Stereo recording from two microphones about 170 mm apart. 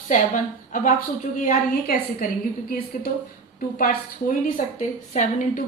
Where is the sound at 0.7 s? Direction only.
50° left (ahead or behind).